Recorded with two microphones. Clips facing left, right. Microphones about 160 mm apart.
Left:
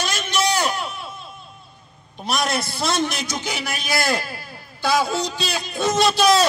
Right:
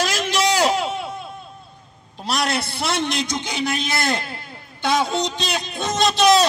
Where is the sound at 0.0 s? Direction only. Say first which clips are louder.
Right 2 dB; 90° right.